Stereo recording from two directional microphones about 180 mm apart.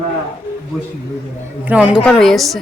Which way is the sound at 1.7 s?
5° right (ahead or behind).